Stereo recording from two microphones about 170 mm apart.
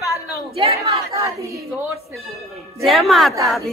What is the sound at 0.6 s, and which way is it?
Speech, 30° right (ahead or behind).